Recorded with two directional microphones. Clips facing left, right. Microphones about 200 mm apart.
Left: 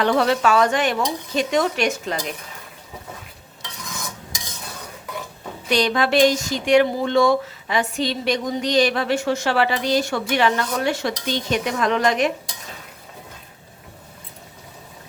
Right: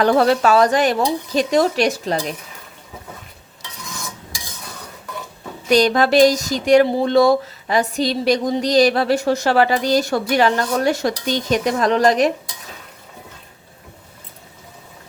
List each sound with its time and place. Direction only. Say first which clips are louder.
0.0 s speech: right 4 dB; 40° right (ahead or behind)
5.6 s speech: right 5 dB; 40° right (ahead or behind)